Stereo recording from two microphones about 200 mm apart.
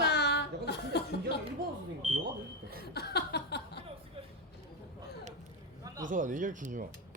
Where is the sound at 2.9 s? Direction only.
55° left (ahead or behind).